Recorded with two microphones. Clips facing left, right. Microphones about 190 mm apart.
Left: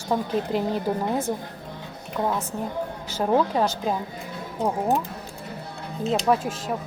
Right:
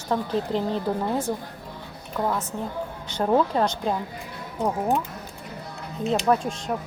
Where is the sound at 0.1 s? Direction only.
10° left (ahead or behind).